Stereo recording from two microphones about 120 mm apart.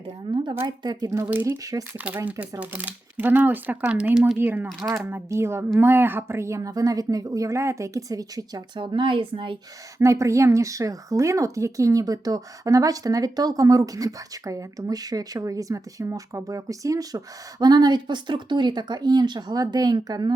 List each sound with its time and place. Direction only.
0.3 s a sound: 40° right (ahead or behind)
0.8 s speech: 35° right (ahead or behind)
1.2 s speech: 15° right (ahead or behind); by 9.6 s 45° right (ahead or behind)
10.0 s speech: 25° right (ahead or behind)